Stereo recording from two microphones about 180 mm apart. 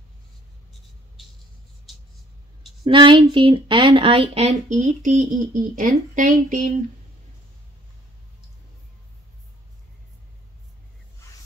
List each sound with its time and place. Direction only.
2.8 s speech: 25° right (ahead or behind); by 6.7 s 45° right (ahead or behind)